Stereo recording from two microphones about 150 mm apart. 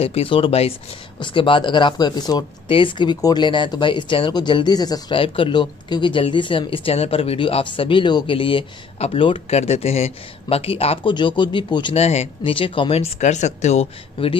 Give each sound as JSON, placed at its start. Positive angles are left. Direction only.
{"t": 0.0, "sound": "speech", "side_deg": 40}
{"t": 12.0, "sound": "speech", "side_deg": 45}